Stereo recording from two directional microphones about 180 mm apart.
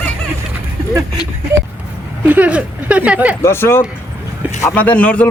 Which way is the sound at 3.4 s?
15° left (ahead or behind).